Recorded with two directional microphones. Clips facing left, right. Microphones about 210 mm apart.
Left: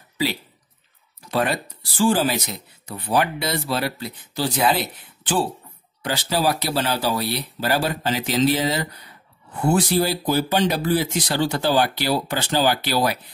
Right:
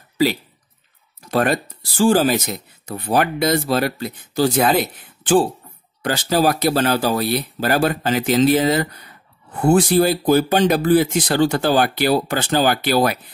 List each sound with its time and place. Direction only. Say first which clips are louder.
1.3 s speech: right 4 dB; 45° right (ahead or behind)